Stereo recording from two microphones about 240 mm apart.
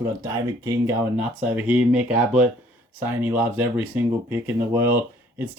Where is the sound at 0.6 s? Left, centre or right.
Centre.